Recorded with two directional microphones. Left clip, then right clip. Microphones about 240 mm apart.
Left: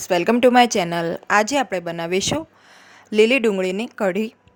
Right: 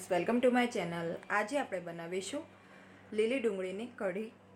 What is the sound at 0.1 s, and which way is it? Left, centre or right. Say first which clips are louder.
A woman's voice: left 14 dB; left.